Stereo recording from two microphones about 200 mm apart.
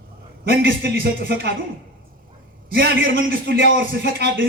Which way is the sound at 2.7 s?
55° right (ahead or behind).